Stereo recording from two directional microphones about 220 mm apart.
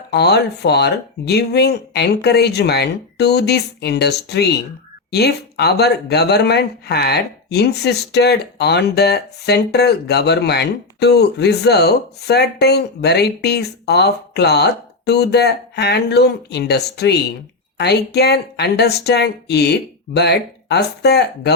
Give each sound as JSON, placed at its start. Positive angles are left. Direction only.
{"t": 0.1, "sound": "speech", "side_deg": 50}